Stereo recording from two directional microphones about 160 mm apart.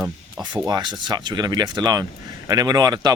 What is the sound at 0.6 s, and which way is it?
Speech, 25° right (ahead or behind).